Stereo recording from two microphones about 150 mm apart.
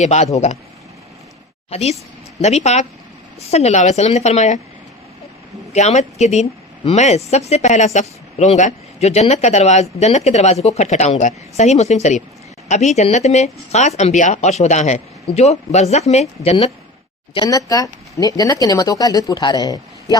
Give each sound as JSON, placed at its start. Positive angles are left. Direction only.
{"t": 0.0, "sound": "speech", "side_deg": 50}
{"t": 1.7, "sound": "speech", "side_deg": 45}
{"t": 5.7, "sound": "speech", "side_deg": 50}
{"t": 17.3, "sound": "speech", "side_deg": 25}